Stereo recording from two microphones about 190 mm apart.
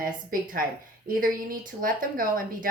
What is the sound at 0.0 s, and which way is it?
A woman's voice, 50° right (ahead or behind).